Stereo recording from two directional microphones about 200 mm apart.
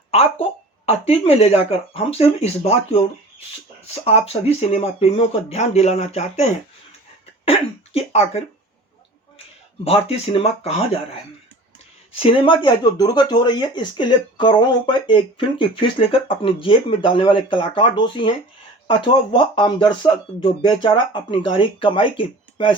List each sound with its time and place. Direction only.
0.1 s speech: 30° left (ahead or behind)
4.0 s speech: 30° left (ahead or behind)
9.8 s speech: 30° left (ahead or behind)
12.1 s speech: 25° left (ahead or behind)